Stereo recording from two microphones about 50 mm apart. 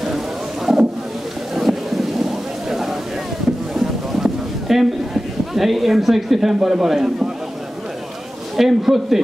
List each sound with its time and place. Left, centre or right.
1.5 s boat: centre
3.7 s a sound: centre
8.5 s a man's voice: centre